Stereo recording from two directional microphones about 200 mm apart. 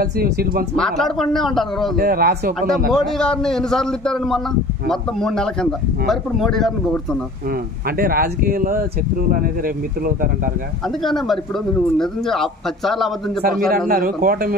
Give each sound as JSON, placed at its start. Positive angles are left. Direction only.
{"t": 0.0, "sound": "speech", "side_deg": -50}
{"t": 0.7, "sound": "speech", "side_deg": 0}
{"t": 2.0, "sound": "speech", "side_deg": -50}
{"t": 2.9, "sound": "speech", "side_deg": 0}
{"t": 8.0, "sound": "speech", "side_deg": -45}
{"t": 11.0, "sound": "speech", "side_deg": 0}
{"t": 13.7, "sound": "speech", "side_deg": -45}